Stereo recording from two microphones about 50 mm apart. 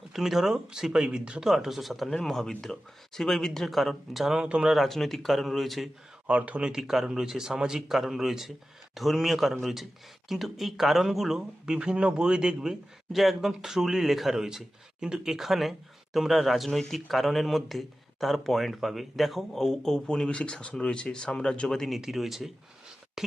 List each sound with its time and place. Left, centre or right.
0.1 s speech: centre
1.5 s speech: centre
4.4 s speech: centre
4.7 s speech: centre
6.2 s speech: right
6.7 s speech: centre
11.6 s speech: centre
13.1 s speech: centre
19.6 s speech: centre
21.7 s speech: centre